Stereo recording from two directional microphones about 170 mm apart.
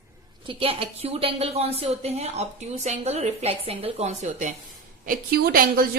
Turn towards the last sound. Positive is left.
turn(degrees=-65)  # may be behind; listen again after turning